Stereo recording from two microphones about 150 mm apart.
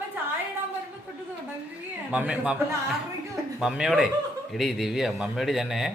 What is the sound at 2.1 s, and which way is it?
A man's voice, 5° right (ahead or behind).